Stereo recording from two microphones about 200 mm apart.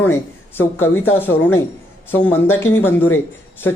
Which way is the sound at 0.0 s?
10° left (ahead or behind).